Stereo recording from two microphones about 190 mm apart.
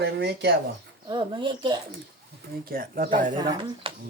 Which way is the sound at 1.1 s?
25° right (ahead or behind).